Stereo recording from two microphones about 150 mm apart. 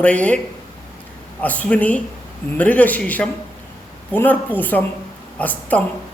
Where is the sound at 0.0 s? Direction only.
10° left (ahead or behind).